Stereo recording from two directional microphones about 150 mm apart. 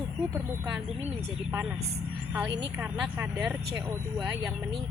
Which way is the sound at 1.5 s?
15° right (ahead or behind).